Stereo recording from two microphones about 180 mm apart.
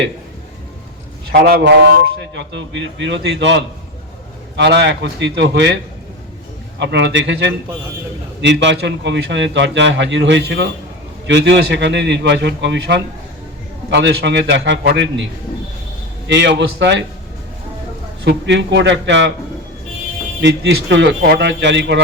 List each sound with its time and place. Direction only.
1.3 s a man's voice: 65° right (ahead or behind); by 7.5 s 90° right
8.4 s a man's voice: 75° right (ahead or behind)
18.3 s a man's voice: 75° right (ahead or behind)
20.4 s a man's voice: 80° right